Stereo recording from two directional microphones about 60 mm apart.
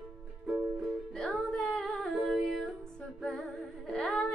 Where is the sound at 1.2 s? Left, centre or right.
Centre.